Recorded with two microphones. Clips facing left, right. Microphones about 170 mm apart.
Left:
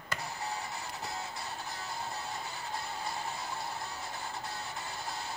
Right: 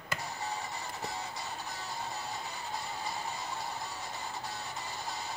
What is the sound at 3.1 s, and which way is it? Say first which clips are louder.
Music: even; centre (ahead or behind).